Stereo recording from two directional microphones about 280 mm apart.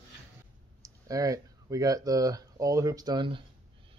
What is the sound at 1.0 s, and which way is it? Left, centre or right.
Speech, centre.